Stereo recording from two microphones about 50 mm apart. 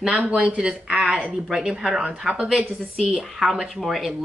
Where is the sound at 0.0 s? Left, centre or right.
Right.